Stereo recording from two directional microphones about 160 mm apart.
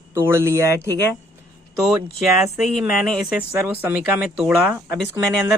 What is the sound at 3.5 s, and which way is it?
Speech, 10° right (ahead or behind).